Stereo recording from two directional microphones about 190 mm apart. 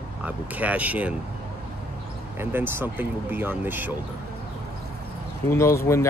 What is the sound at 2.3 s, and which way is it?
Speech, 10° right (ahead or behind).